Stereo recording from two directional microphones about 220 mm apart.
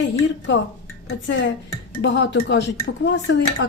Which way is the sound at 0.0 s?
55° left (ahead or behind).